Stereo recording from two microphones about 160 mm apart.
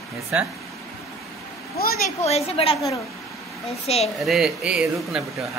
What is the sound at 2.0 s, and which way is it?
Speech, 40° left (ahead or behind).